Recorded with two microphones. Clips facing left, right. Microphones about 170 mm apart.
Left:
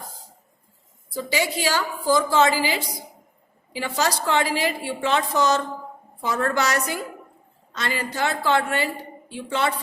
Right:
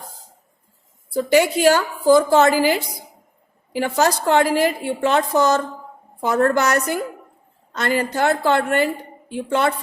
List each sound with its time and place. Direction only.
1.1 s a woman's voice: 60° right (ahead or behind)